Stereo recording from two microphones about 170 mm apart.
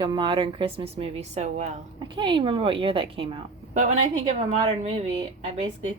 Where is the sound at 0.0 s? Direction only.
25° right (ahead or behind); by 1.6 s 40° right (ahead or behind).